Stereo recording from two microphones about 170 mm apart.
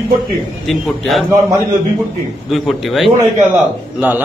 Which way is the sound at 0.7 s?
Centre (ahead or behind).